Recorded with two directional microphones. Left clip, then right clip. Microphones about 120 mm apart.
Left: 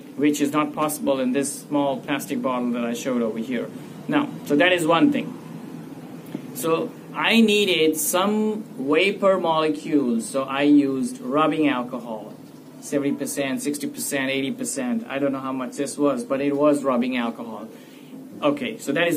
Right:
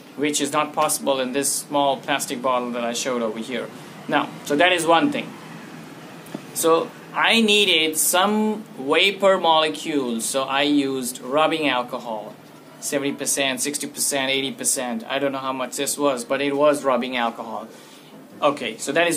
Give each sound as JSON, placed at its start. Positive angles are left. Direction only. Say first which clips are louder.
{"t": 0.2, "sound": "speech", "louder": "even", "side_deg": -25}
{"t": 6.6, "sound": "speech", "louder": "right 5 dB", "side_deg": -25}
{"t": 14.8, "sound": "speech", "louder": "right 1 dB", "side_deg": -40}
{"t": 18.4, "sound": "speech", "louder": "right 2 dB", "side_deg": -25}